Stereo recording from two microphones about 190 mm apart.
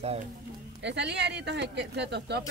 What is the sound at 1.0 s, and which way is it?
Speech, 65° right (ahead or behind).